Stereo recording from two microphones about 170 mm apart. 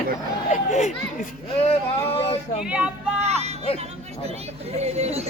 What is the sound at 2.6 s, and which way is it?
Child singing, 5° right (ahead or behind).